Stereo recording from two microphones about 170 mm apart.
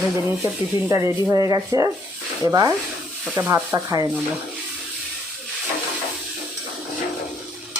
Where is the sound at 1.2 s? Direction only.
20° right (ahead or behind).